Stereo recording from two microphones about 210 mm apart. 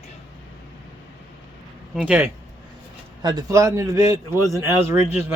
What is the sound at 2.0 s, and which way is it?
Speech, 5° right (ahead or behind).